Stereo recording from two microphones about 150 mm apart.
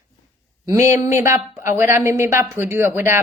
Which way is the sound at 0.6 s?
20° right (ahead or behind).